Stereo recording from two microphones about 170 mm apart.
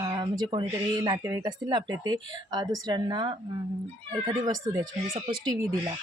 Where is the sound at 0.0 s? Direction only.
25° right (ahead or behind).